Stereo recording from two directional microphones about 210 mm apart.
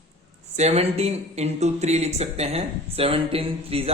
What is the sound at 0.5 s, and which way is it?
Speech, 30° right (ahead or behind).